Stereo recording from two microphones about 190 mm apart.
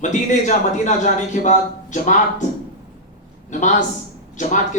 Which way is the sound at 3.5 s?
40° left (ahead or behind).